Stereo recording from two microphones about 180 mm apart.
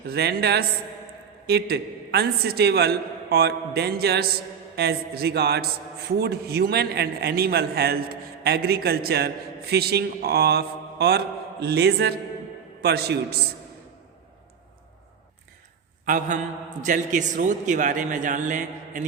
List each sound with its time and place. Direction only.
0.1 s a man's voice: 60° right (ahead or behind)
16.0 s a man's voice: 45° right (ahead or behind)